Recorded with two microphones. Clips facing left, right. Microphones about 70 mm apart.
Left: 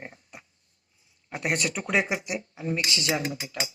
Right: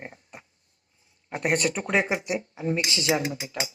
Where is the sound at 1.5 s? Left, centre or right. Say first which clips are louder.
Right 2 dB; right.